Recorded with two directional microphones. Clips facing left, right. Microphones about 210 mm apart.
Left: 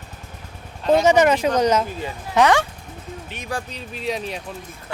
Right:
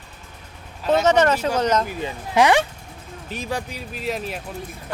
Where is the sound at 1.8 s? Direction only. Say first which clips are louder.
Right 1 dB; 15° right (ahead or behind).